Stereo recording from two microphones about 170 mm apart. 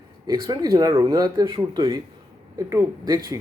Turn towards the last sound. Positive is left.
turn(degrees=-20)  # may be behind; listen again after turning